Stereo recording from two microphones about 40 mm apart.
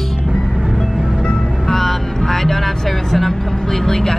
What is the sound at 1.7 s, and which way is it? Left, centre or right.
Vehicle, centre.